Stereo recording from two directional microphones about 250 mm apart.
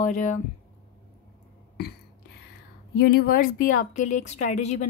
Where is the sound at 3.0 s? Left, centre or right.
Left.